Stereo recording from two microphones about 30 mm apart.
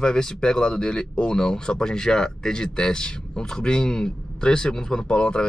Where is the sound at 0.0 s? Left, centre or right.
Left.